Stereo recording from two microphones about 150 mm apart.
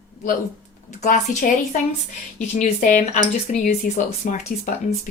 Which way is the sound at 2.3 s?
55° left (ahead or behind).